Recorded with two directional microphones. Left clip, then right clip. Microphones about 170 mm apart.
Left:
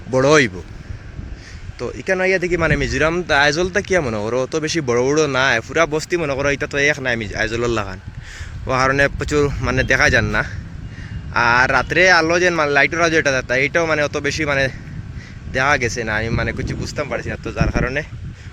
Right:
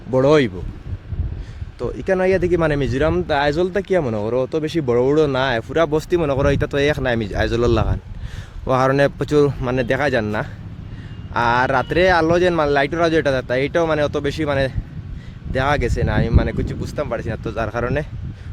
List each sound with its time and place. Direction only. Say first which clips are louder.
0.1 s speech: left 1 dB; 15° right (ahead or behind)
2.0 s speech: even; 30° right (ahead or behind)
16.8 s speech: left 1 dB; 30° right (ahead or behind)